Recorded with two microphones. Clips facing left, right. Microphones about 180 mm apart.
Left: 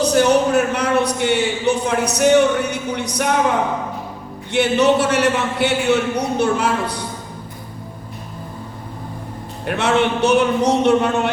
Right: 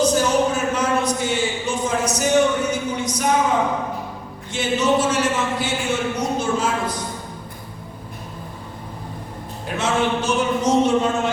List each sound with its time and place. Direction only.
0.0 s a sound: 65° left (ahead or behind)
4.5 s a man's voice: 65° left (ahead or behind)
9.6 s a man's voice: 65° left (ahead or behind)